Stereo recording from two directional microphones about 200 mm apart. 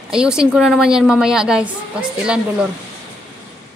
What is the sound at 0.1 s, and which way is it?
A woman's voice, 5° right (ahead or behind).